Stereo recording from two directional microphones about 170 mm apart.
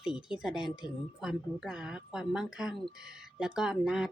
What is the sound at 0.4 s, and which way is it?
A woman's voice, 5° right (ahead or behind).